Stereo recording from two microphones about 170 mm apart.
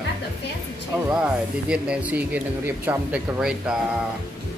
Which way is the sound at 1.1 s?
5° right (ahead or behind).